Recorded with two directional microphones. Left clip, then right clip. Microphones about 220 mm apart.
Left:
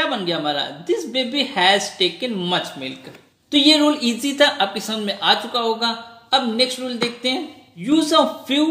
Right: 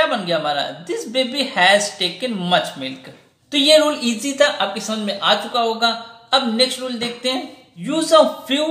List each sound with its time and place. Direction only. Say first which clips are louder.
0.1 s speech: right 2 dB; 35° left (ahead or behind)